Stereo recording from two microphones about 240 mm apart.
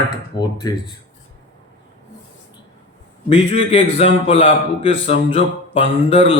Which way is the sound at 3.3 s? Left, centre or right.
Left.